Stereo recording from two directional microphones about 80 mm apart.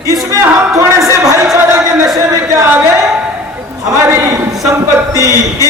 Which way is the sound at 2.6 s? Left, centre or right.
Right.